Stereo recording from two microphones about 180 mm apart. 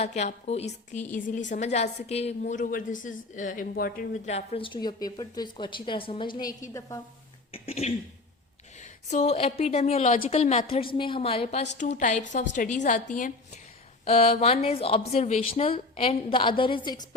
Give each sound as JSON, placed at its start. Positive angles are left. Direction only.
{"t": 0.0, "sound": "a woman's voice", "side_deg": 40}
{"t": 4.3, "sound": "a woman's voice", "side_deg": 35}
{"t": 7.5, "sound": "a woman's voice", "side_deg": 35}
{"t": 11.8, "sound": "a woman's voice", "side_deg": 45}
{"t": 14.0, "sound": "a woman's voice", "side_deg": 35}